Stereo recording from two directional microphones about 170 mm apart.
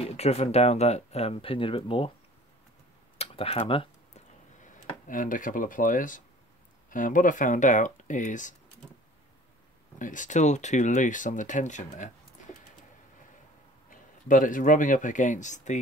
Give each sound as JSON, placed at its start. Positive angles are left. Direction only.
{"t": 0.0, "sound": "speech", "side_deg": 35}
{"t": 3.2, "sound": "a sound", "side_deg": 35}
{"t": 4.6, "sound": "speech", "side_deg": 50}
{"t": 9.9, "sound": "speech", "side_deg": 50}
{"t": 13.8, "sound": "speech", "side_deg": 50}